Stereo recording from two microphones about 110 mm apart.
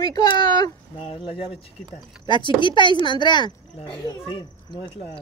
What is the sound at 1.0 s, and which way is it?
Speech, 50° left (ahead or behind).